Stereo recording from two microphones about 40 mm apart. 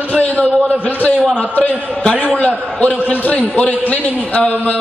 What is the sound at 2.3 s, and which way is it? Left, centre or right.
Speech, left.